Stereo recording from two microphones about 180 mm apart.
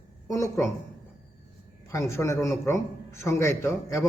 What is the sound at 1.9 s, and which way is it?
A man's voice, 15° left (ahead or behind).